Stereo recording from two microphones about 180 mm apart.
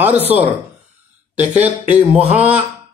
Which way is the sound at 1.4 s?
40° right (ahead or behind).